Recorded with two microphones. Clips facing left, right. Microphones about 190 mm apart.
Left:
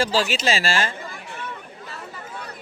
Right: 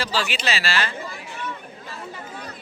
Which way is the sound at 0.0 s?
45° left (ahead or behind).